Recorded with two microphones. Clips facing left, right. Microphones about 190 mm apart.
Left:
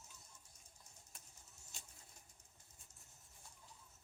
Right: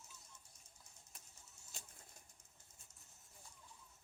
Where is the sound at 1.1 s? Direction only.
Centre (ahead or behind).